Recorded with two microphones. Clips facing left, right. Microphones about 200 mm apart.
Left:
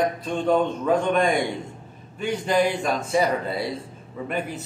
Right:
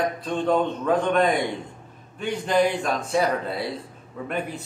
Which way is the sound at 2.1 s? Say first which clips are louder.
Even; 5° left (ahead or behind).